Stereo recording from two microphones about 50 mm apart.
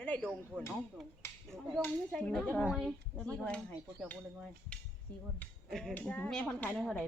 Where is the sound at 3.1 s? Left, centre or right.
Left.